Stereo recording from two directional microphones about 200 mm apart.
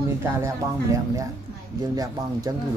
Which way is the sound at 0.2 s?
15° right (ahead or behind).